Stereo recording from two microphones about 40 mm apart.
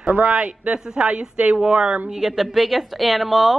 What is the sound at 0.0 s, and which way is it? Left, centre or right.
Speech, right.